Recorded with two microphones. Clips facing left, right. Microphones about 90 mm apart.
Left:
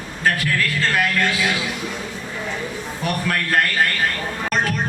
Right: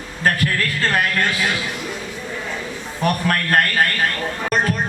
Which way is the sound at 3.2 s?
50° right (ahead or behind).